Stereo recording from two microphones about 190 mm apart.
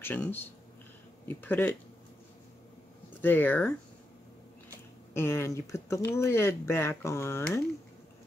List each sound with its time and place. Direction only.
0.0 s speech: 10° left (ahead or behind)
3.2 s speech: 10° left (ahead or behind)
5.1 s speech: 15° left (ahead or behind)